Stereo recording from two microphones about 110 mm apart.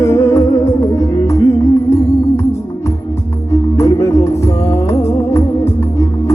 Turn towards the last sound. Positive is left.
turn(degrees=25)  # may be behind; listen again after turning